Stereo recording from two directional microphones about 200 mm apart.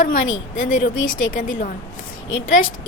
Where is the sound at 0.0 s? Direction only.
40° left (ahead or behind).